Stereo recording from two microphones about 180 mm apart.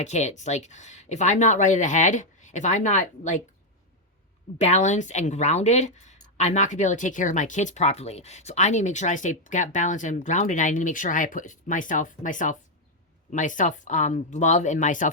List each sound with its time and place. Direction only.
0.0 s speech: 40° left (ahead or behind)
4.5 s a woman's voice: 40° left (ahead or behind)